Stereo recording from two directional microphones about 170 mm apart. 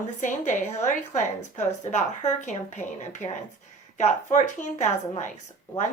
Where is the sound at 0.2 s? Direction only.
45° left (ahead or behind).